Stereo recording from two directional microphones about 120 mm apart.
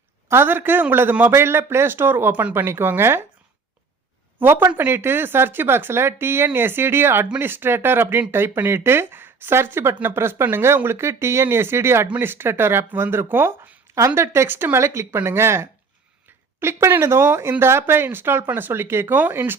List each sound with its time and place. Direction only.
0.3 s speech: 20° right (ahead or behind)
4.4 s speech: 15° right (ahead or behind)